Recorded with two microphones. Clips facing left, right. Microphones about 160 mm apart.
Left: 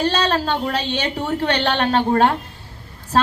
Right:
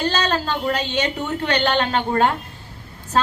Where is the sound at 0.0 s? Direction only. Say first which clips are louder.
Left 2 dB; 30° left (ahead or behind).